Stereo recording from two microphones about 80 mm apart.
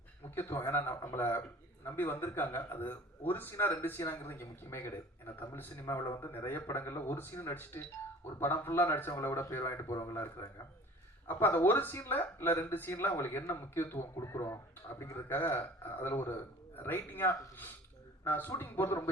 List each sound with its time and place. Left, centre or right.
0.3 s speech: left